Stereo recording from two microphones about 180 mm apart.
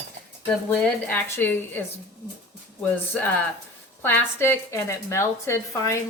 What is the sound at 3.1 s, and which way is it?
A woman's voice, 10° left (ahead or behind).